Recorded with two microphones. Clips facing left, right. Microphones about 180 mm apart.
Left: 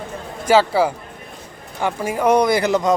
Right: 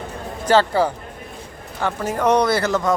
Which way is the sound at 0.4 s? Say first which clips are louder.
Left 1 dB; 10° left (ahead or behind).